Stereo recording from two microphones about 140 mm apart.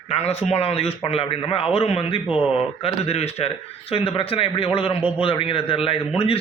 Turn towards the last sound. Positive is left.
turn(degrees=40)  # may be behind; listen again after turning